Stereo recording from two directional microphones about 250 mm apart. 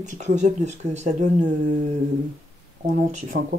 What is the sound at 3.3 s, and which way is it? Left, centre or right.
Speech, right.